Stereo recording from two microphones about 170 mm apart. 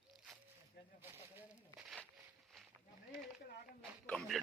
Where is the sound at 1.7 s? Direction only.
5° right (ahead or behind).